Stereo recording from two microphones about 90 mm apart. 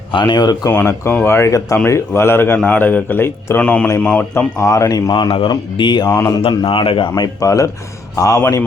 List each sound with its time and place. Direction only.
0.1 s speech: 60° left (ahead or behind)
0.7 s a man's voice: 25° left (ahead or behind)
3.6 s speech: 10° left (ahead or behind)
4.6 s speech: 35° left (ahead or behind)
5.1 s speech: 70° left (ahead or behind)
6.1 s a man's voice: 30° left (ahead or behind)
6.7 s speech: 80° left
7.2 s a man's voice: 40° left (ahead or behind)